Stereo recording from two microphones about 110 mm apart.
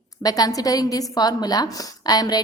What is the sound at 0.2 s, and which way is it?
A woman's voice, 35° left (ahead or behind).